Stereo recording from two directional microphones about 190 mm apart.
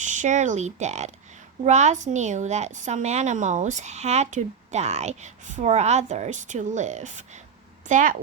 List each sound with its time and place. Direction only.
0.0 s a woman's voice: 40° right (ahead or behind)